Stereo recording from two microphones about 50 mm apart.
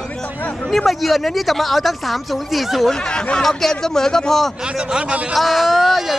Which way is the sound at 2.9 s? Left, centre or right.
Centre.